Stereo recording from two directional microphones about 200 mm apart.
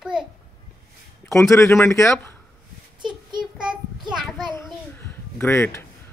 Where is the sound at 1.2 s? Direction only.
15° left (ahead or behind).